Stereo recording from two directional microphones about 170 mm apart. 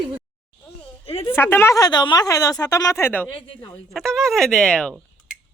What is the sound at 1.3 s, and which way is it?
Speech, 15° left (ahead or behind).